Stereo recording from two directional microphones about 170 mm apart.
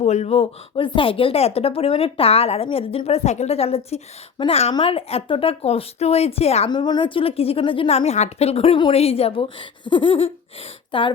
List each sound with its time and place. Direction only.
0.0 s speech: 40° left (ahead or behind)
6.7 s speech: 25° left (ahead or behind)